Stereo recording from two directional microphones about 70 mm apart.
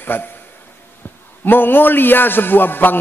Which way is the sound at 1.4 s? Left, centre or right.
Left.